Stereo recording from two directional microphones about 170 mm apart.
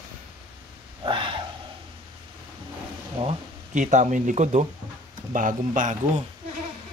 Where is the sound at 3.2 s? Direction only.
30° right (ahead or behind).